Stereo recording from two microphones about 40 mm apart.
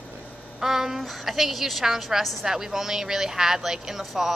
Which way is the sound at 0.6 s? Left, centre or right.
Centre.